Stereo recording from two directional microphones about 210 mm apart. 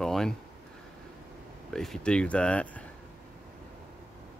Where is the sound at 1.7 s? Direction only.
Centre (ahead or behind).